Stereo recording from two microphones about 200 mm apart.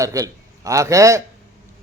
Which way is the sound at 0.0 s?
15° right (ahead or behind).